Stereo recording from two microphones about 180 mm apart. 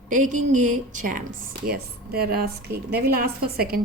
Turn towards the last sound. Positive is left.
turn(degrees=-55)  # may be behind; listen again after turning